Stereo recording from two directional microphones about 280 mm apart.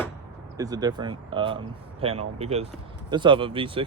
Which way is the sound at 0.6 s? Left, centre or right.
Centre.